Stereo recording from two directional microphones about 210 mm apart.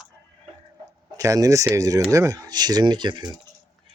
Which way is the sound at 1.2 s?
15° right (ahead or behind).